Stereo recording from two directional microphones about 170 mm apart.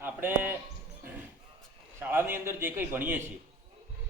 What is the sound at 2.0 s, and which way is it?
A man's voice, 15° right (ahead or behind).